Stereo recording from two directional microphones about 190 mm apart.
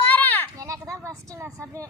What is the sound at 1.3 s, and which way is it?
Speech, 15° right (ahead or behind).